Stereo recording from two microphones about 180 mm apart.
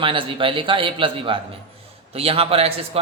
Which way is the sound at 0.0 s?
30° right (ahead or behind).